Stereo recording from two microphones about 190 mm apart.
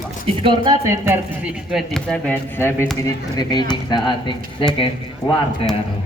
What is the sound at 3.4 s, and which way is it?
Speech, 20° left (ahead or behind).